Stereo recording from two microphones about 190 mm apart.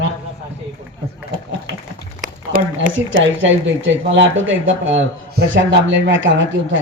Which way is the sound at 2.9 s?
90° right.